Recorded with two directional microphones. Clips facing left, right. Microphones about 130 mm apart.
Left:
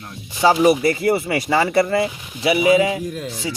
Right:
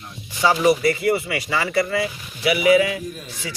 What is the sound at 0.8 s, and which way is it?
Speech, 30° left (ahead or behind).